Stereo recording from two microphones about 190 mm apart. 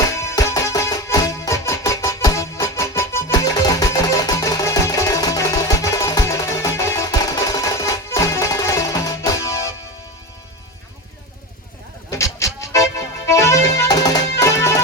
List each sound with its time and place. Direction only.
0.2 s music: 15° left (ahead or behind)
12.1 s music: 15° left (ahead or behind)